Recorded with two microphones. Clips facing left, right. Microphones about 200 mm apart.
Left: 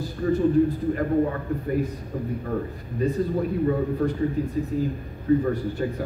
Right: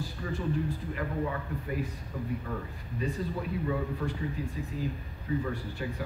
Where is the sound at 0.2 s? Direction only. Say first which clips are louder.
Left 13 dB; 40° left (ahead or behind).